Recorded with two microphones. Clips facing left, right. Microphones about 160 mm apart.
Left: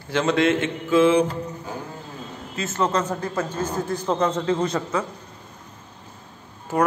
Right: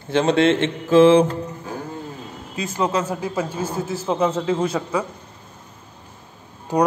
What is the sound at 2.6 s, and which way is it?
A man's voice, 10° right (ahead or behind).